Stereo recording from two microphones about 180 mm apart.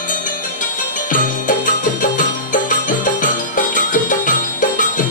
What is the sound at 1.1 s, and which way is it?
Music, 45° left (ahead or behind).